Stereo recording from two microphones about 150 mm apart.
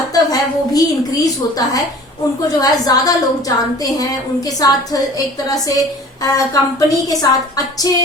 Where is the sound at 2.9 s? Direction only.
25° left (ahead or behind).